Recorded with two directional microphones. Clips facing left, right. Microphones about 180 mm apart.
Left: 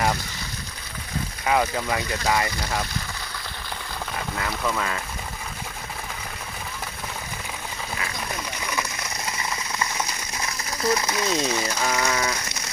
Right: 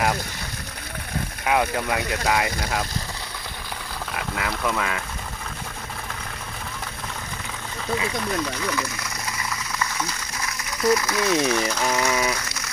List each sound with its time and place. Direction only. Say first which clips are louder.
1.5 s speech: even; 5° right (ahead or behind)
4.4 s speech: right 1 dB; centre (ahead or behind)
9.4 s a sound: even; 20° left (ahead or behind)
10.7 s speech: right 3 dB; 25° left (ahead or behind)
11.8 s ratchet: right 2 dB; 15° right (ahead or behind)